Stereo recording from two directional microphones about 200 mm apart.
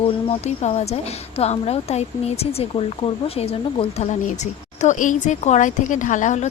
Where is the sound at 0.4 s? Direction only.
35° left (ahead or behind).